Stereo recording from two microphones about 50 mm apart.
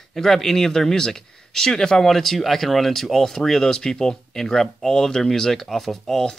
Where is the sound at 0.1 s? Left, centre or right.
Centre.